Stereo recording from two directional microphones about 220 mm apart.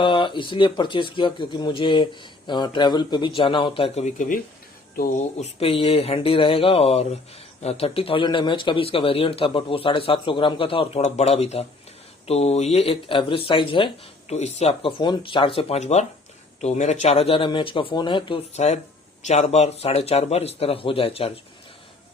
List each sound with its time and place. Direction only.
0.0 s a man's voice: 20° left (ahead or behind)